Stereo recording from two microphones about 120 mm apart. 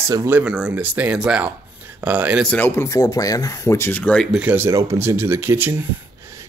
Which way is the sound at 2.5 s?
20° left (ahead or behind).